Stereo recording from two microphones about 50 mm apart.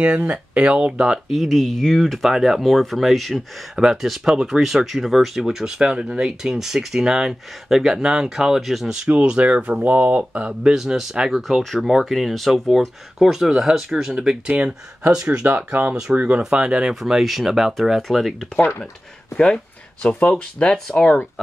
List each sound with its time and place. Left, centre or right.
0.0 s speech: right
1.3 s speech: centre
2.3 s speech: centre
2.6 s speech: centre
8.5 s speech: centre
9.0 s speech: centre
10.6 s speech: centre
15.4 s speech: right; by 16.9 s centre
16.9 s speech: centre
19.3 s speech: centre
20.7 s speech: centre